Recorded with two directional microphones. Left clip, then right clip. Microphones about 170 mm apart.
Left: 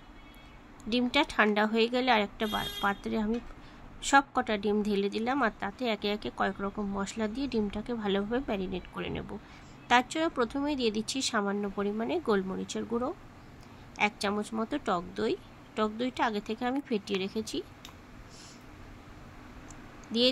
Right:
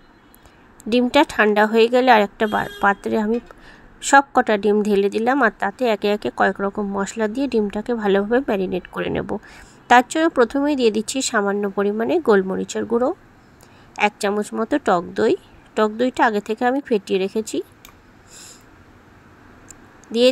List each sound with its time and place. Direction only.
0.8 s speech: 40° right (ahead or behind)